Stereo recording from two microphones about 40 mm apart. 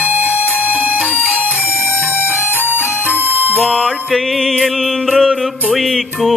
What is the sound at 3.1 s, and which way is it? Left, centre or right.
Music, right.